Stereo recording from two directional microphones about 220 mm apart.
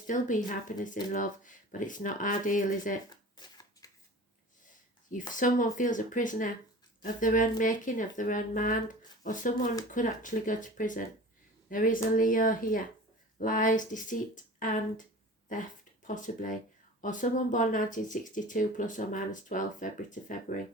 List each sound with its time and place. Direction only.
0.1 s speech: 35° left (ahead or behind)
3.3 s shuffling cards: 15° left (ahead or behind)
5.3 s speech: 35° left (ahead or behind)
16.0 s speech: 35° left (ahead or behind)